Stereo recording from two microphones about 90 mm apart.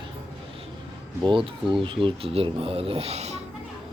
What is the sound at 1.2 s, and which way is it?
Speech, 65° right (ahead or behind).